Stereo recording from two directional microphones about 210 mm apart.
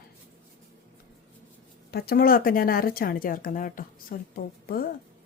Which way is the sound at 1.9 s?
45° left (ahead or behind).